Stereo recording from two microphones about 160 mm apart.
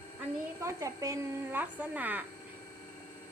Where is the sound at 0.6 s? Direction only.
20° right (ahead or behind).